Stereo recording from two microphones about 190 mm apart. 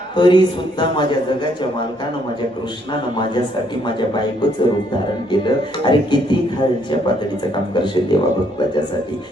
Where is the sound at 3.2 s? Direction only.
25° left (ahead or behind).